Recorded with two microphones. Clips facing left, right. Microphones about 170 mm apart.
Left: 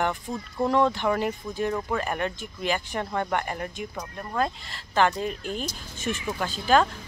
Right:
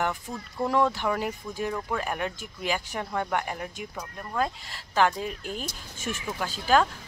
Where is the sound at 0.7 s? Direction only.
5° right (ahead or behind).